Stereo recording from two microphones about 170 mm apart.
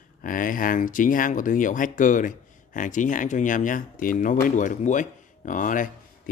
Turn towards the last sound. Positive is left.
turn(degrees=50)  # may be behind; listen again after turning